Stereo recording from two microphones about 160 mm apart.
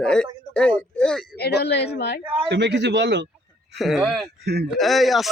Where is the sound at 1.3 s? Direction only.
90° left.